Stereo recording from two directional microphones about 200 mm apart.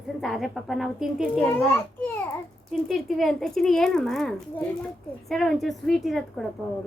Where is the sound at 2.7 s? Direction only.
Centre (ahead or behind).